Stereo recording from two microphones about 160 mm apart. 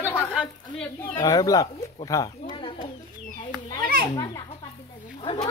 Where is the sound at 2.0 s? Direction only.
25° left (ahead or behind).